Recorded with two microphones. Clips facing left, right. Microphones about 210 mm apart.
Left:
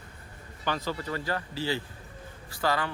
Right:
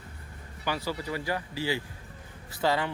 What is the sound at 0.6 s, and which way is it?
Speech, 10° right (ahead or behind).